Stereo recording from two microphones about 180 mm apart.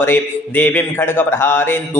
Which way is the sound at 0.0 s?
10° left (ahead or behind).